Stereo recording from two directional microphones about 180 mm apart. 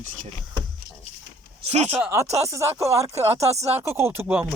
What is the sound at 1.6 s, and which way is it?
Speech, 40° right (ahead or behind).